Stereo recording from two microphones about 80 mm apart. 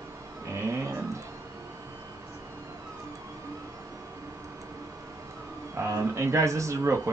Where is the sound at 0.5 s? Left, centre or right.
Right.